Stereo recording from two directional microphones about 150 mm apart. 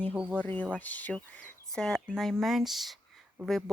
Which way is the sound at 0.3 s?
10° left (ahead or behind).